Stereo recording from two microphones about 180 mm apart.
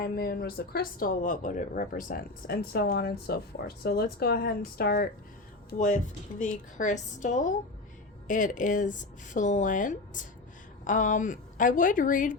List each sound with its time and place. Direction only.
0.0 s speech: 55° left (ahead or behind)
5.7 s speech: 45° left (ahead or behind)